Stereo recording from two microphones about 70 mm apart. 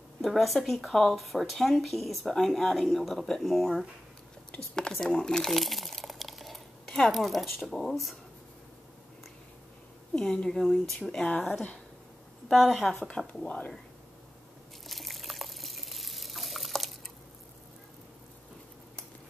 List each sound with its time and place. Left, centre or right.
0.2 s speech: centre
4.5 s speech: centre
10.1 s speech: centre
11.0 s speech: centre
12.4 s a woman's voice: centre
13.3 s speech: centre
14.9 s water: centre